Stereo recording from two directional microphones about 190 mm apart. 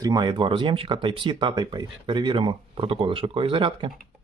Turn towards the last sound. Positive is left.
turn(degrees=-25)  # may be behind; listen again after turning